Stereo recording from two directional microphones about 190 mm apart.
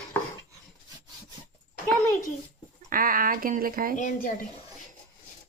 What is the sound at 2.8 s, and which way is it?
Speech, 50° right (ahead or behind).